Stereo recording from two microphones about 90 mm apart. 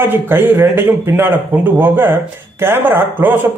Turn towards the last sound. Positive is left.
turn(degrees=-20)  # may be behind; listen again after turning